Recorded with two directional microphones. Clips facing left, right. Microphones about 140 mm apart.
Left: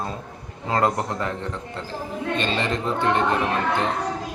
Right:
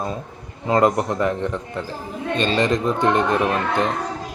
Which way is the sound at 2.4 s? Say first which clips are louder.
Right 7 dB; 15° right (ahead or behind).